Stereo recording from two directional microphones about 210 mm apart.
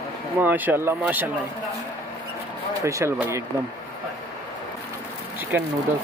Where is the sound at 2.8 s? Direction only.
15° right (ahead or behind).